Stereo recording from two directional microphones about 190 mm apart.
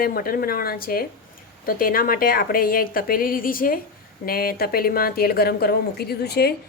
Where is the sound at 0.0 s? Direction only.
50° left (ahead or behind).